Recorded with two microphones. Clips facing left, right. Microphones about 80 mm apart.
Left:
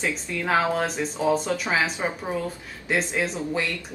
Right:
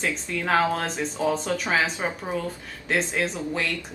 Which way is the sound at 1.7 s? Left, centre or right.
Centre.